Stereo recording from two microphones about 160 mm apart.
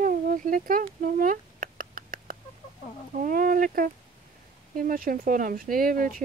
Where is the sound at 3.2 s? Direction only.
60° right (ahead or behind).